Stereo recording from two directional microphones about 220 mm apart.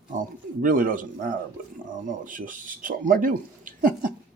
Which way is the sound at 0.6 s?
40° right (ahead or behind).